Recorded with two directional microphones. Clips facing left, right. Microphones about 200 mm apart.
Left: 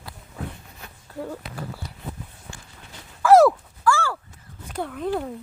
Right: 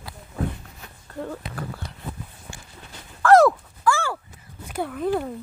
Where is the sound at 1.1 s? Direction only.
5° left (ahead or behind).